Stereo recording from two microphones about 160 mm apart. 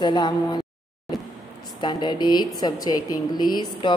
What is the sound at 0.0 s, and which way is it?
Speech, 30° left (ahead or behind).